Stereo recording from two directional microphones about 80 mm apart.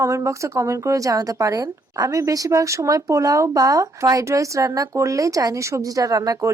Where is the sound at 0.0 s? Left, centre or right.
Right.